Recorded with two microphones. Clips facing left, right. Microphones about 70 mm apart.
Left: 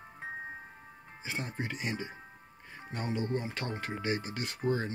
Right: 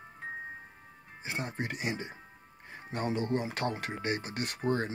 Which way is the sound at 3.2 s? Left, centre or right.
Right.